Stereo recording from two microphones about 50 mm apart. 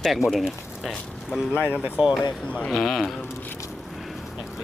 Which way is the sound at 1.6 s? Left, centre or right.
Left.